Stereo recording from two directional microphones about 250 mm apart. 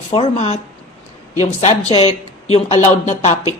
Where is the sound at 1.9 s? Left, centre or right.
Left.